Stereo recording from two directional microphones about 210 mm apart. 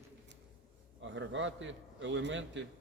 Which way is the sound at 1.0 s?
60° right (ahead or behind).